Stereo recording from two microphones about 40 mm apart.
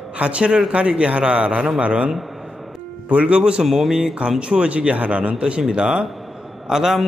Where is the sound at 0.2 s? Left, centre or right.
Right.